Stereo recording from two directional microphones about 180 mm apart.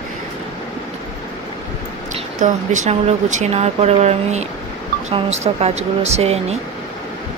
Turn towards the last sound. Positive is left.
turn(degrees=-35)  # may be behind; listen again after turning